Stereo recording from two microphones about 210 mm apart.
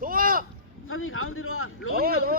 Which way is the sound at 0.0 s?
40° right (ahead or behind).